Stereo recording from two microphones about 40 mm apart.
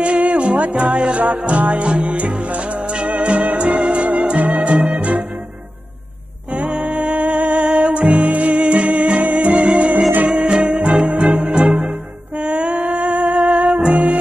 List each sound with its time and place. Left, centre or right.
0.0 s music: right
6.5 s music: right